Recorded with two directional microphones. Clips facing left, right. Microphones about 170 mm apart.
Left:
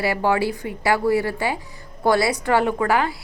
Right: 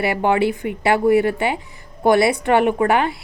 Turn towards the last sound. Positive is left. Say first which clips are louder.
# right 3 dB
turn(degrees=-20)  # may be behind; listen again after turning